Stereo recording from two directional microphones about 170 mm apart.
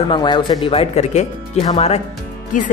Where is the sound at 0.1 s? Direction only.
25° left (ahead or behind).